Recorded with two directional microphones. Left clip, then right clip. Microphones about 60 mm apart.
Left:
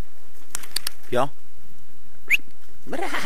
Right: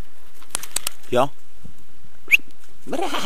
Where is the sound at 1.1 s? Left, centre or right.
Right.